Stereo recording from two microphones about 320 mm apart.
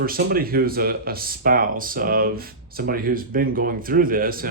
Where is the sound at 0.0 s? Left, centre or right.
Right.